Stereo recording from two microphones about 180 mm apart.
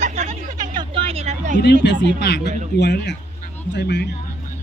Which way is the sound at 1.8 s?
75° left (ahead or behind).